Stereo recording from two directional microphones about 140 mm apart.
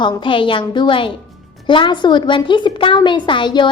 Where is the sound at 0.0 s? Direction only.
35° left (ahead or behind).